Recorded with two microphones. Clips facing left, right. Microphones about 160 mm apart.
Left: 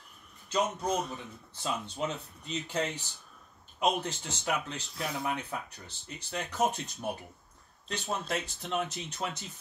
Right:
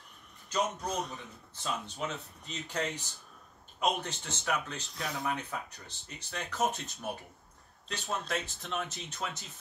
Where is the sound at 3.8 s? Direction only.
10° left (ahead or behind).